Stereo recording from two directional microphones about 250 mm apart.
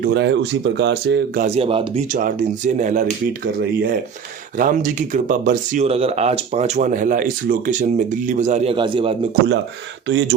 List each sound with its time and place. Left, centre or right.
0.0 s speech: right
2.0 s speech: right
10.1 s speech: right